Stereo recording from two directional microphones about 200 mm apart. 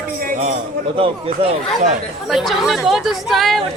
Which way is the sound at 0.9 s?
30° right (ahead or behind).